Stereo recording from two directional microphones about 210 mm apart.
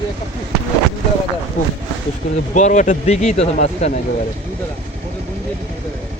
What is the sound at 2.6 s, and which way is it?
Speech, 35° left (ahead or behind).